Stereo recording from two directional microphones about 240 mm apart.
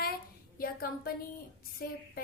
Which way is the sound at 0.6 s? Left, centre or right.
Left.